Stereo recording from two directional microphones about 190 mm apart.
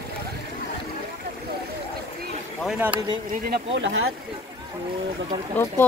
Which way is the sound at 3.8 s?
90° right.